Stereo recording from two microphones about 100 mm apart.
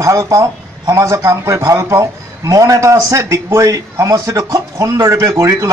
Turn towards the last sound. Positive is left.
turn(degrees=-30)  # may be behind; listen again after turning